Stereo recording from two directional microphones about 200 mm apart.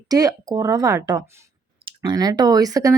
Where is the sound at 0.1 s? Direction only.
15° right (ahead or behind).